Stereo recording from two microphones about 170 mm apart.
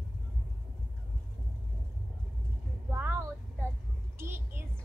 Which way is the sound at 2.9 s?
15° right (ahead or behind).